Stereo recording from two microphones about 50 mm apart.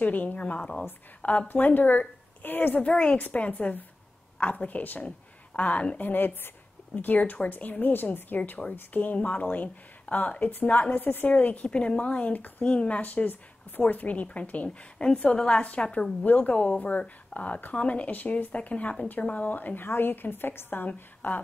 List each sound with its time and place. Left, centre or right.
0.0 s speech: left
1.5 s a woman's voice: left
6.0 s a woman's voice: left
8.4 s speech: left
11.7 s a woman's voice: centre
15.6 s a woman's voice: left
16.3 s speech: left
16.5 s a woman's voice: left